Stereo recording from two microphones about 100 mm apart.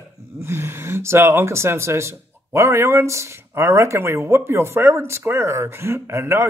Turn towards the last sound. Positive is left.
turn(degrees=-25)  # may be behind; listen again after turning